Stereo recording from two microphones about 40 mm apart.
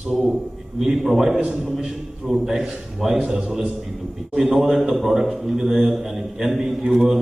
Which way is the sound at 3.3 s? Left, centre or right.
Right.